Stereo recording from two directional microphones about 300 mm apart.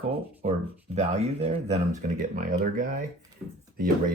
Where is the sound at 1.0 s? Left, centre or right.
Right.